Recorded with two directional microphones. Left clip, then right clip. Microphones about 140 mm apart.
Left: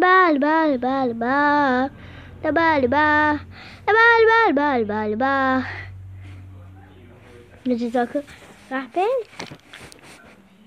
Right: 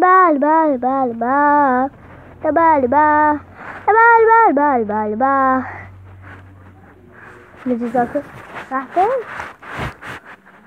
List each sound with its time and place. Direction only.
0.0 s child singing: 25° left (ahead or behind)
2.4 s speech: 20° left (ahead or behind)
7.7 s speech: 25° left (ahead or behind)